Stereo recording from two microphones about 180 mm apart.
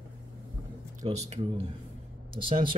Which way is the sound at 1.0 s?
35° right (ahead or behind).